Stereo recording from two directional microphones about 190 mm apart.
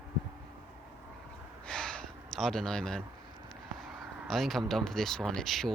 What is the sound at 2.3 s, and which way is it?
Speech, centre (ahead or behind).